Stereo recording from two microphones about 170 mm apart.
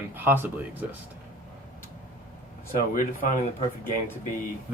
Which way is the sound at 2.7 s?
55° left (ahead or behind).